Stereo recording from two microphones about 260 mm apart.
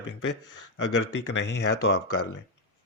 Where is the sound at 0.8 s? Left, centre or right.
Left.